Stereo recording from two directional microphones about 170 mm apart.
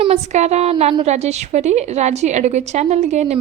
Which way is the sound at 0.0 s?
40° right (ahead or behind).